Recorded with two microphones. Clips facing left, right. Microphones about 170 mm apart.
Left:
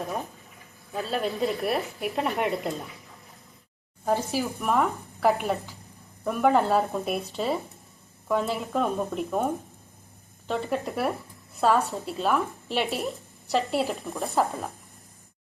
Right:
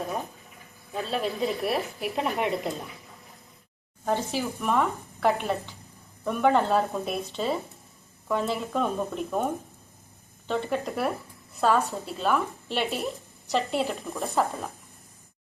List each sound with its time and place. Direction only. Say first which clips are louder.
0.9 s speech: left 1 dB; centre (ahead or behind)
4.0 s speech: left 1 dB; 5° left (ahead or behind)
8.3 s speech: left 1 dB; centre (ahead or behind)